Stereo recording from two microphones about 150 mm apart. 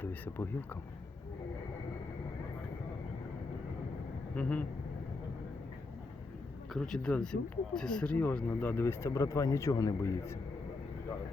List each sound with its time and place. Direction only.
0.0 s speech: 15° left (ahead or behind)
4.4 s speech: 10° left (ahead or behind)
6.7 s speech: 5° left (ahead or behind); by 10.3 s 20° left (ahead or behind)